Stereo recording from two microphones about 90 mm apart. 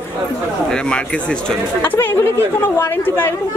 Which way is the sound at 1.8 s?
25° left (ahead or behind).